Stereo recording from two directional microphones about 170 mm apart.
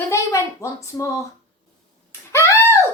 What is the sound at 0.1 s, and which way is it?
Speech, 20° left (ahead or behind).